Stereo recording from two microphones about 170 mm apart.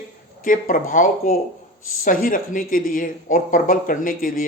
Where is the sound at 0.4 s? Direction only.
55° left (ahead or behind).